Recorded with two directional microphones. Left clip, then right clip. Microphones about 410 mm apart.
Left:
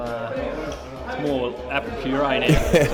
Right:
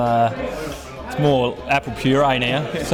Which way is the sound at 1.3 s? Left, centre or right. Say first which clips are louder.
Right 6 dB; right.